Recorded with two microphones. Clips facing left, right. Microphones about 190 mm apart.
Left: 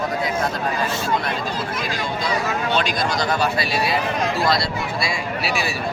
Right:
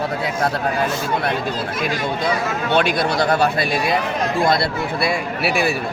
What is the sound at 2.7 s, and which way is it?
Speech, 60° right (ahead or behind).